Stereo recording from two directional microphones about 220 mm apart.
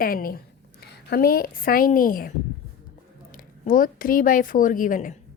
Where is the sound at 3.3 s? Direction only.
35° left (ahead or behind).